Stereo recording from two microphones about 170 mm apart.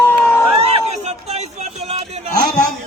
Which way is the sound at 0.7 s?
40° right (ahead or behind).